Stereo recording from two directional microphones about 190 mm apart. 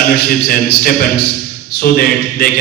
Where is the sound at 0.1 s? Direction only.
55° left (ahead or behind).